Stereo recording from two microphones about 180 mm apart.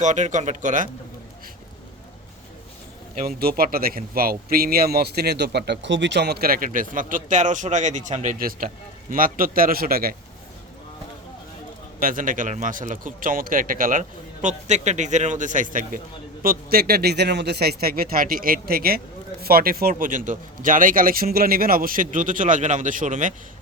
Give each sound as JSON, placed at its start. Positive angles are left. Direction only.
{"t": 0.0, "sound": "a man's voice", "side_deg": -40}
{"t": 3.2, "sound": "a man's voice", "side_deg": -55}
{"t": 11.9, "sound": "a man's voice", "side_deg": -50}